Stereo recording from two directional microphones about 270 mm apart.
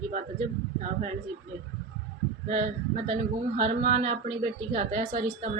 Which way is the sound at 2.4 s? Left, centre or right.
Right.